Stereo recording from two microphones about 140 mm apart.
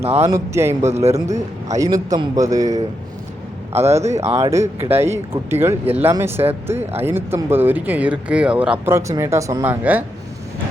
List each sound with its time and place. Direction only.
0.0 s speech: 45° right (ahead or behind)
0.3 s a man's voice: 20° right (ahead or behind)
0.9 s speech: 50° right (ahead or behind)
1.7 s a man's voice: 25° right (ahead or behind)
3.7 s a man's voice: 50° right (ahead or behind)
4.5 s a man's voice: 20° right (ahead or behind)